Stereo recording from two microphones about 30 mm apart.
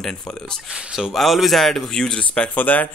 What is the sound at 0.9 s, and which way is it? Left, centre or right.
Speech, centre.